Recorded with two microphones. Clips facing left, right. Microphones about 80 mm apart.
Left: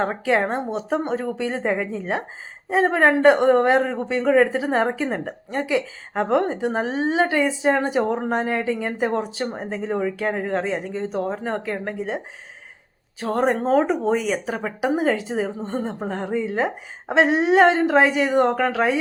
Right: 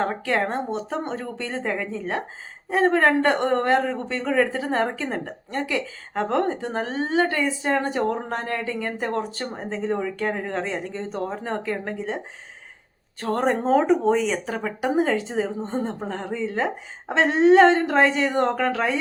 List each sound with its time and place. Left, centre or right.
0.0 s speech: centre